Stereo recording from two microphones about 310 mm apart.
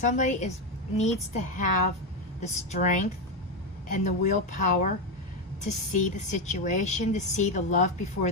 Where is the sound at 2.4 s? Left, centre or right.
Left.